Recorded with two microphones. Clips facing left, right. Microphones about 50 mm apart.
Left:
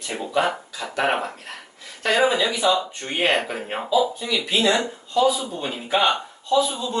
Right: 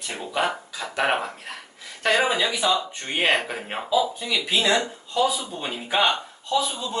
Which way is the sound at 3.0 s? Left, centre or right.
Centre.